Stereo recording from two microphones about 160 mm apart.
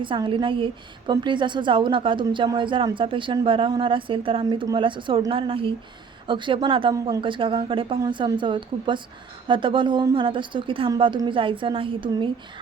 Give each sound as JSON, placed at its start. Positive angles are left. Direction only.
{"t": 0.0, "sound": "a woman's voice", "side_deg": -30}